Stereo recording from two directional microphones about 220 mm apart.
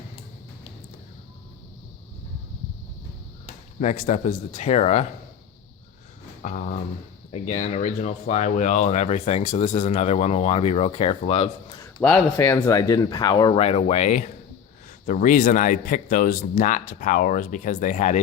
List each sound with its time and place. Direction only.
3.4 s speech: 30° left (ahead or behind)
6.4 s speech: 35° left (ahead or behind)
12.0 s speech: 10° left (ahead or behind); by 18.2 s 35° left (ahead or behind)